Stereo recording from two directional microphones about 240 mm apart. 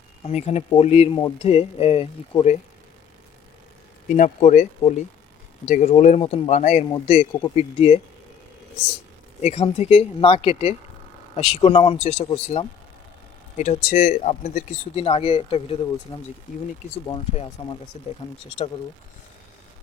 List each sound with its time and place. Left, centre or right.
0.3 s speech: left
4.1 s speech: left
9.4 s speech: left